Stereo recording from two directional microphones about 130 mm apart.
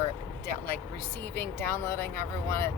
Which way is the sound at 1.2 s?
15° left (ahead or behind).